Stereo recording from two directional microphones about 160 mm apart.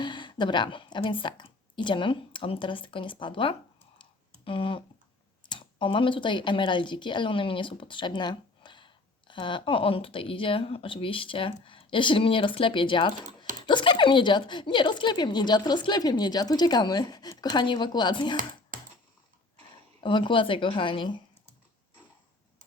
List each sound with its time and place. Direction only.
0.0 s a woman's voice: 30° left (ahead or behind)
20.0 s a woman's voice: 30° left (ahead or behind)